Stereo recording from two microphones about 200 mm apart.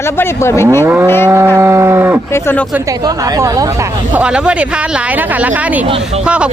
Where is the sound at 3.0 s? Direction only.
20° right (ahead or behind).